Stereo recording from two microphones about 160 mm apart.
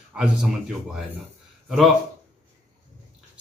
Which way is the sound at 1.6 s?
Centre (ahead or behind).